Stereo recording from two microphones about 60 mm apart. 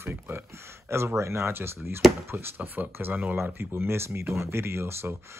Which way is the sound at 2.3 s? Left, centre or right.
Right.